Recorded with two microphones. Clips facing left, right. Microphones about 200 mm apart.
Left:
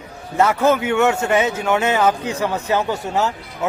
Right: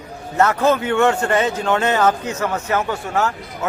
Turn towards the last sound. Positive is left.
turn(degrees=20)  # may be behind; listen again after turning